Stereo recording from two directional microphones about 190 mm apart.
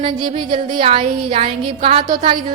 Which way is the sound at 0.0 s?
25° right (ahead or behind).